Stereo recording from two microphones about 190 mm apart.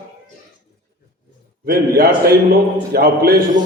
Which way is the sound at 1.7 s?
55° right (ahead or behind).